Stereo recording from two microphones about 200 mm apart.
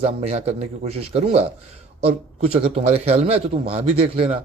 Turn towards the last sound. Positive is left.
turn(degrees=-30)  # may be behind; listen again after turning